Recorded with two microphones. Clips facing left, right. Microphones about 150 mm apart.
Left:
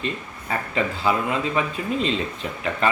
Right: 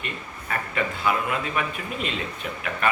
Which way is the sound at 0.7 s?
25° left (ahead or behind).